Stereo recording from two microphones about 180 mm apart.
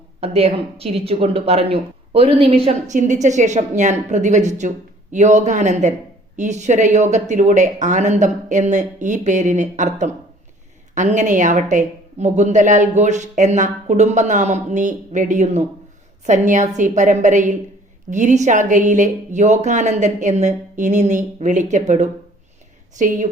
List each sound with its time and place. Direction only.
0.2 s a woman's voice: 35° right (ahead or behind)